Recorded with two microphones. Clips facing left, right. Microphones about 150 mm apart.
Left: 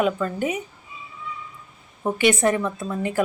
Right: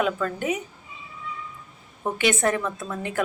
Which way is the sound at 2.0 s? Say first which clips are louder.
Left 3 dB; 5° left (ahead or behind).